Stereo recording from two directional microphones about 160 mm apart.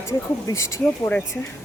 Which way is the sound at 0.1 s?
20° left (ahead or behind).